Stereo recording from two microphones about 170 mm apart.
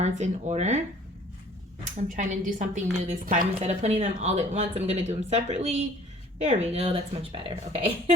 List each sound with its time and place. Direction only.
0.0 s a woman's voice: 40° right (ahead or behind)
1.8 s a woman's voice: 45° right (ahead or behind)